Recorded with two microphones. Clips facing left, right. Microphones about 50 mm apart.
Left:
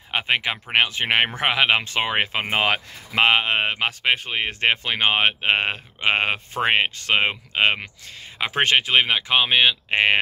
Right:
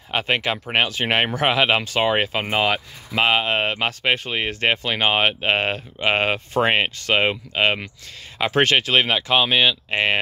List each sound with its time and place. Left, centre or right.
0.1 s speech: left
3.4 s speech: centre